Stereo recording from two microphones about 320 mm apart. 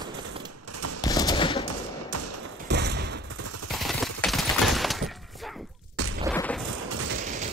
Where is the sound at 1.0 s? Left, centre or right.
Centre.